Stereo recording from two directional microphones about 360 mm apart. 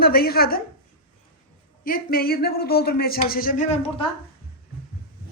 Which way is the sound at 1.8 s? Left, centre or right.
Left.